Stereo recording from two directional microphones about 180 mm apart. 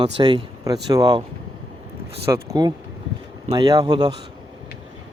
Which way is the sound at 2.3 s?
20° right (ahead or behind).